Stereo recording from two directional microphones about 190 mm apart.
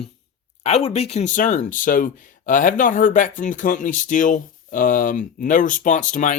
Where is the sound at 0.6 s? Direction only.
30° left (ahead or behind).